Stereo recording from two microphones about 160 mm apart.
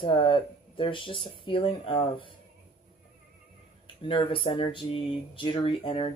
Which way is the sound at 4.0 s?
30° left (ahead or behind).